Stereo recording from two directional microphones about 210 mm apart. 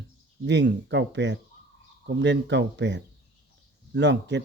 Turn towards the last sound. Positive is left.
turn(degrees=-55)  # may be behind; listen again after turning